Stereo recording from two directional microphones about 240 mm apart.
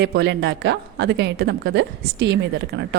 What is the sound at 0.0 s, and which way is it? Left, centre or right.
Speech, right.